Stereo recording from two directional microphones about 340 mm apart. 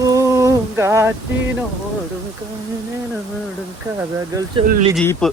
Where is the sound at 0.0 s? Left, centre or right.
Centre.